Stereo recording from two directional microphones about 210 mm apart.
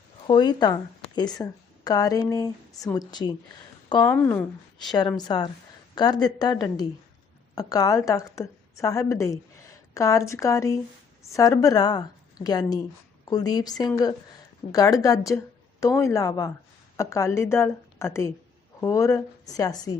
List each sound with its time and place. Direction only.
0.3 s a woman's voice: 20° left (ahead or behind)
4.0 s a woman's voice: 10° left (ahead or behind)
4.8 s a woman's voice: 20° left (ahead or behind)